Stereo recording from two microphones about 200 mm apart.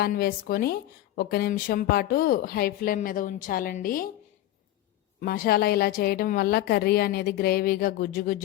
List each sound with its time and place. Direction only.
0.0 s a woman's voice: 45° left (ahead or behind)
5.2 s a woman's voice: 50° left (ahead or behind)